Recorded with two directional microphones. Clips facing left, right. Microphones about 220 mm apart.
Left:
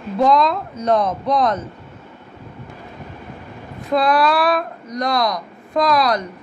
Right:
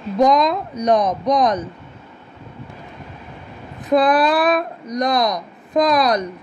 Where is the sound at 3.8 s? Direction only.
20° right (ahead or behind).